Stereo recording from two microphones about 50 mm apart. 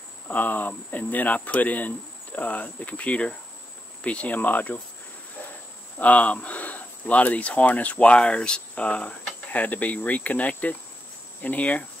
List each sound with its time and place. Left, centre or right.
0.3 s speech: left
5.9 s speech: left